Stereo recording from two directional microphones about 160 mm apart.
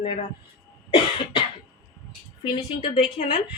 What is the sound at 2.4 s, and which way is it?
Speech, 30° left (ahead or behind).